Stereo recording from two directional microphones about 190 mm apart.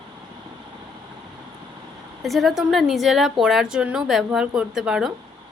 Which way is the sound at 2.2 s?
Centre (ahead or behind).